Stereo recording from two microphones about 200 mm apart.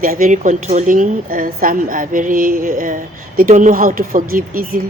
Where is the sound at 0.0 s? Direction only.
45° right (ahead or behind).